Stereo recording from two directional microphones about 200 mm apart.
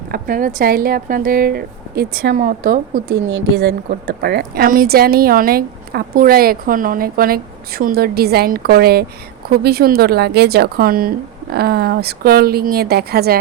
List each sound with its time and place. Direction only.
0.1 s a woman's voice: 45° right (ahead or behind)
3.5 s a woman's voice: 55° right (ahead or behind)